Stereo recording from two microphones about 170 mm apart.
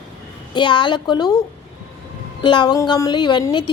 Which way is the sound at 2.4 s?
25° left (ahead or behind).